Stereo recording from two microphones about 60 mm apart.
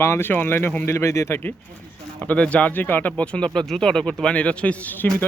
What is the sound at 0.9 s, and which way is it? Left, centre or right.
Speech, left.